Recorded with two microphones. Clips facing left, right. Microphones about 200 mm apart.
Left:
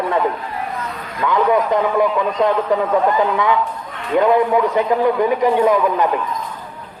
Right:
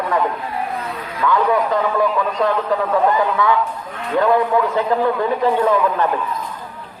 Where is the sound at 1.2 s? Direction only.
20° left (ahead or behind).